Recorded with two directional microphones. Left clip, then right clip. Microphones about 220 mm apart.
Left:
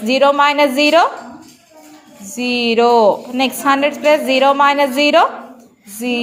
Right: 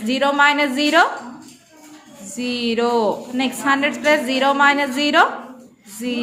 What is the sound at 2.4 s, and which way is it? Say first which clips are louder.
A woman's voice: left 7 dB; 15° left (ahead or behind).